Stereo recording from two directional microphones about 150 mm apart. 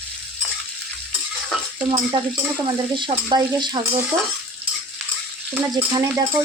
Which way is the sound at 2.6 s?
30° right (ahead or behind).